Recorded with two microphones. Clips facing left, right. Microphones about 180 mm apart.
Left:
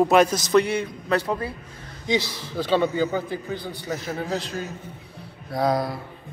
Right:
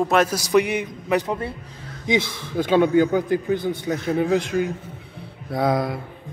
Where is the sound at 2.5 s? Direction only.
15° right (ahead or behind).